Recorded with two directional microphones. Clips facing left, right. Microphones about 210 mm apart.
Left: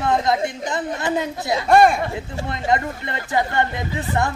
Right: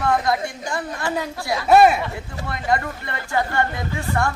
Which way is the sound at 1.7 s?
5° right (ahead or behind).